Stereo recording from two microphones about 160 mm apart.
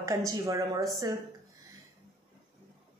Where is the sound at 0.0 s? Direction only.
20° right (ahead or behind).